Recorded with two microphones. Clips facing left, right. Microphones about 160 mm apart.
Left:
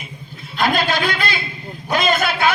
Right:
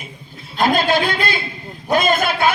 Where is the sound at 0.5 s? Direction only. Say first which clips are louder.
Right 3 dB; 45° right (ahead or behind).